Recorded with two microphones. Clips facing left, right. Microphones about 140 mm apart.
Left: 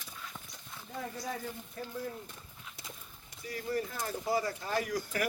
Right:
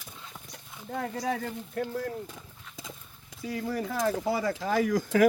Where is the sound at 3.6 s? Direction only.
90° right.